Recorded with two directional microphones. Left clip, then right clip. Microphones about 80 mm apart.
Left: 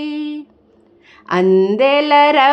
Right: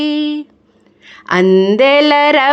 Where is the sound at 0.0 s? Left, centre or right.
Right.